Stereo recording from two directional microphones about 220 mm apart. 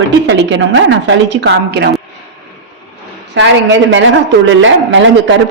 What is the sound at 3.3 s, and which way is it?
A woman's voice, 55° right (ahead or behind).